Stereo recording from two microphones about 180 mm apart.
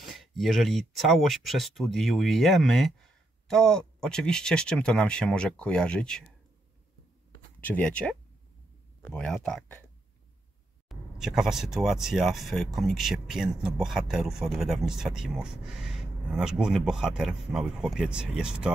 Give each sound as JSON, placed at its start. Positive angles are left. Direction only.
{"t": 0.0, "sound": "speech", "side_deg": 0}
{"t": 7.6, "sound": "speech", "side_deg": 10}
{"t": 10.9, "sound": "speech", "side_deg": 0}